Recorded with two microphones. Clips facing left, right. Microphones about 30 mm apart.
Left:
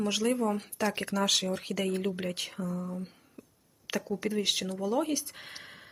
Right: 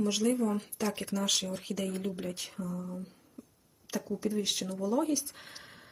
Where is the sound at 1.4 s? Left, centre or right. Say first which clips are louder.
Left 3 dB; left.